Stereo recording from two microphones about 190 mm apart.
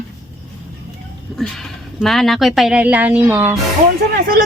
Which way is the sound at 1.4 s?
Centre (ahead or behind).